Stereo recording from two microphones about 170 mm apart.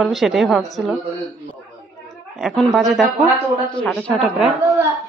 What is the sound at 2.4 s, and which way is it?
Speech, centre (ahead or behind).